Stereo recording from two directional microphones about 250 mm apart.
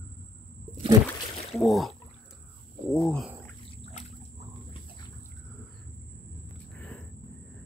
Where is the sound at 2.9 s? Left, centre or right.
Centre.